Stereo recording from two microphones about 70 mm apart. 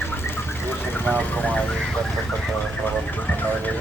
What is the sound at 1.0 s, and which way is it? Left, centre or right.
Speech, left.